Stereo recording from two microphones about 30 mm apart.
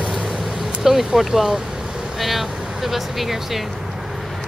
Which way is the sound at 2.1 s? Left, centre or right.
Centre.